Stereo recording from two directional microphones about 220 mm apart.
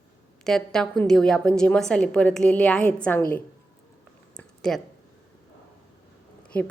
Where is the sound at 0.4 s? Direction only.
Centre (ahead or behind).